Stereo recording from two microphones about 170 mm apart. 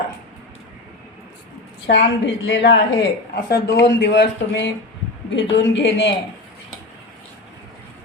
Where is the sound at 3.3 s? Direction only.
75° left (ahead or behind).